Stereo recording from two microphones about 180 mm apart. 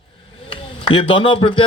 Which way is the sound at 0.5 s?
30° left (ahead or behind).